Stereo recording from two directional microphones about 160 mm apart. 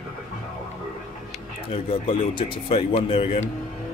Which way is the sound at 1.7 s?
35° left (ahead or behind).